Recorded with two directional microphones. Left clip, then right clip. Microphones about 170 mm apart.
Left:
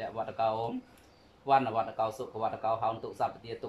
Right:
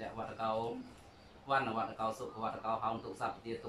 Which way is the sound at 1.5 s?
55° left (ahead or behind).